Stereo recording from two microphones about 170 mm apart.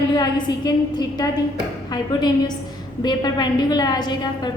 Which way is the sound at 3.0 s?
25° left (ahead or behind).